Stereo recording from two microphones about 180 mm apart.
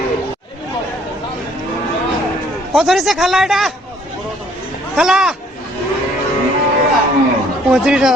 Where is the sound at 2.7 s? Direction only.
Centre (ahead or behind).